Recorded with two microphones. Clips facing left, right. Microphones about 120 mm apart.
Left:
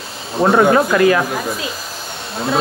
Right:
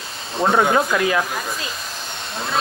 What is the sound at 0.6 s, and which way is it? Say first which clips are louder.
Speech: left 6 dB; 60° left (ahead or behind).